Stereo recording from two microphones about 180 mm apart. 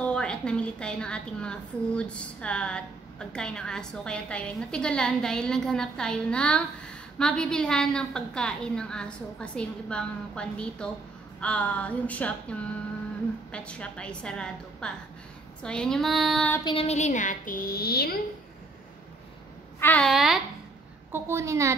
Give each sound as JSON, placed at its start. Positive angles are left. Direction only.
{"t": 0.0, "sound": "a woman's voice", "side_deg": 5}
{"t": 16.7, "sound": "a woman's voice", "side_deg": 35}
{"t": 19.8, "sound": "a woman's voice", "side_deg": 5}
{"t": 21.1, "sound": "a woman's voice", "side_deg": -15}